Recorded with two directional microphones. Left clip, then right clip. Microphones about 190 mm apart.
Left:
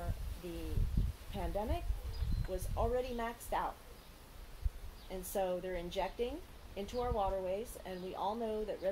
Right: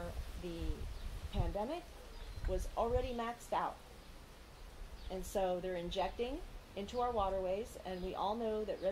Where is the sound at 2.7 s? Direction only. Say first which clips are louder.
Left 1 dB; 15° right (ahead or behind).